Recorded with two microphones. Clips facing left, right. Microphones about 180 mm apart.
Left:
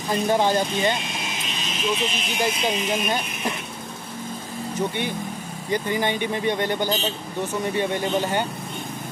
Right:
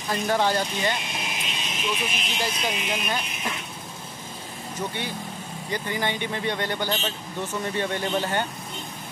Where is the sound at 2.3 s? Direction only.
20° left (ahead or behind).